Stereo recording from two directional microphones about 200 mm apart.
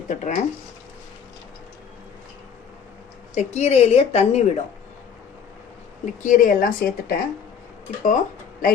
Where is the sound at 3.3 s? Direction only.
35° left (ahead or behind).